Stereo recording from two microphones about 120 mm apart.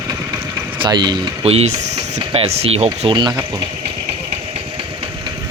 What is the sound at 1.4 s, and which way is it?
Speech, 60° right (ahead or behind).